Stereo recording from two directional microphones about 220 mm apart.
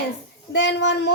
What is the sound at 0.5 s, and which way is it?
Speech, 55° left (ahead or behind).